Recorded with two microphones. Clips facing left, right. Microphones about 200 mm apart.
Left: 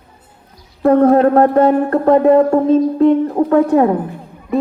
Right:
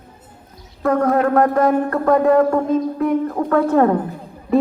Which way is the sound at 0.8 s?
30° left (ahead or behind).